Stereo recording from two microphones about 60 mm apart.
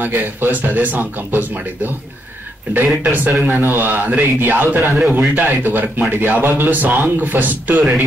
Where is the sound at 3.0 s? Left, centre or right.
Right.